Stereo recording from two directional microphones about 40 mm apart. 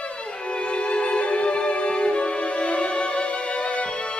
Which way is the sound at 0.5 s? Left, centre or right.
Left.